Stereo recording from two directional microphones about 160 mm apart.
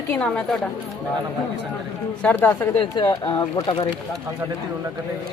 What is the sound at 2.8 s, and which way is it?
Speech, 30° left (ahead or behind).